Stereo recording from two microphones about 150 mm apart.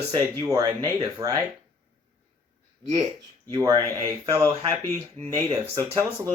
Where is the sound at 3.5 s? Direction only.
25° right (ahead or behind).